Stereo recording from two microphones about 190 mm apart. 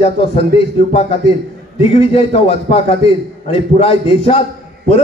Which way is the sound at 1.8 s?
30° left (ahead or behind).